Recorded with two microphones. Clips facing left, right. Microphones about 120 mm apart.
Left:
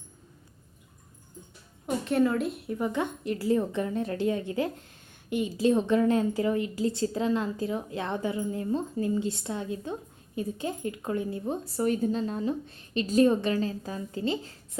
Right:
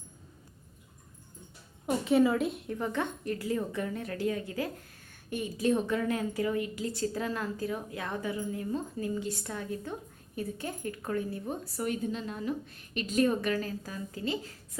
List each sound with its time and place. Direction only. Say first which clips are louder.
2.0 s a woman's voice: even; 5° right (ahead or behind); by 3.3 s 15° left (ahead or behind)
3.3 s a woman's voice: left 7 dB; 25° left (ahead or behind)
11.9 s a woman's voice: left 6 dB; 35° left (ahead or behind)